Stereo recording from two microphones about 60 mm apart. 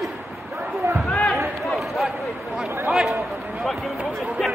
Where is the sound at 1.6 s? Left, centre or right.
Centre.